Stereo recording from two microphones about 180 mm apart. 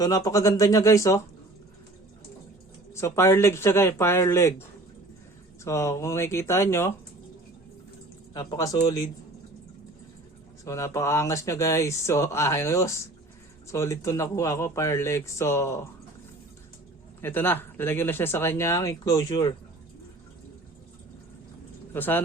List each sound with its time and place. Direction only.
0.0 s speech: 20° left (ahead or behind)
2.9 s speech: 15° left (ahead or behind)
5.6 s speech: 15° left (ahead or behind)
8.3 s speech: 20° left (ahead or behind)
10.6 s speech: 15° left (ahead or behind)
17.2 s speech: 10° left (ahead or behind)
21.9 s speech: 10° left (ahead or behind)